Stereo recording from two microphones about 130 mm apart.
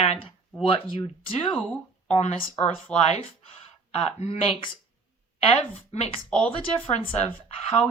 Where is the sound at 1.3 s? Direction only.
45° left (ahead or behind).